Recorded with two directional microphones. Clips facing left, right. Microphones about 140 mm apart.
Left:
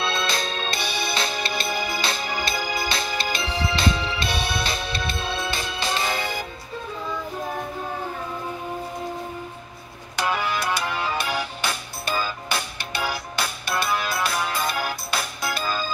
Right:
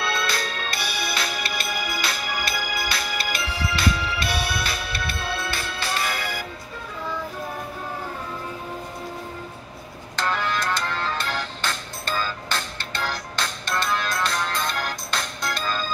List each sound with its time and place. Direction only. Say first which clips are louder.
0.0 s music: left 1 dB; 20° left (ahead or behind)
10.1 s music: left 1 dB; 10° left (ahead or behind)